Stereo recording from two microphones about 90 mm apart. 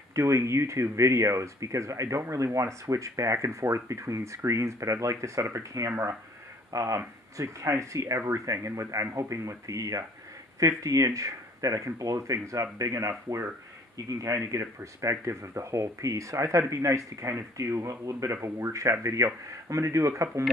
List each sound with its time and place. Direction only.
0.1 s speech: 35° right (ahead or behind)